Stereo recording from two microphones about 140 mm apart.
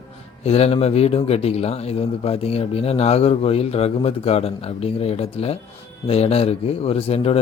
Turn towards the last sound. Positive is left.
turn(degrees=45)  # may be behind; listen again after turning